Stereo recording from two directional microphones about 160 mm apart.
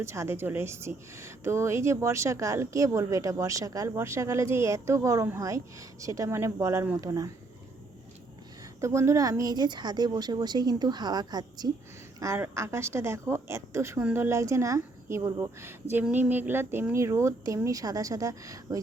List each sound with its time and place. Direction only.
0.0 s a woman's voice: 15° right (ahead or behind)
8.8 s a woman's voice: 20° right (ahead or behind)